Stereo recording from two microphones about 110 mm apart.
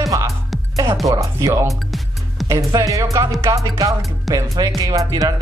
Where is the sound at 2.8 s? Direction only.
30° right (ahead or behind).